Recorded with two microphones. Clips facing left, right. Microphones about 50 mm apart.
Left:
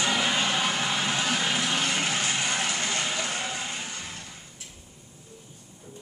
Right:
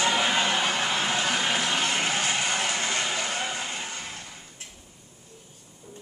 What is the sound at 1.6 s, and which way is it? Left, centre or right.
Vehicle, centre.